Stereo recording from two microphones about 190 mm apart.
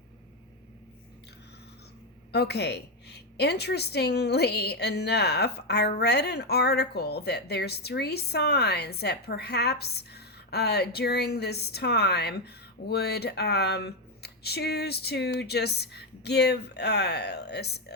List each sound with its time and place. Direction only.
2.3 s a woman's voice: 60° left (ahead or behind)